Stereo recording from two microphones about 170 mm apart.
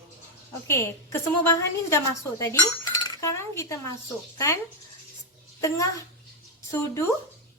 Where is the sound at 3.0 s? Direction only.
15° left (ahead or behind).